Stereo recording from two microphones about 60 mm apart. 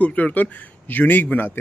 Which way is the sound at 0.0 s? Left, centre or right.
Left.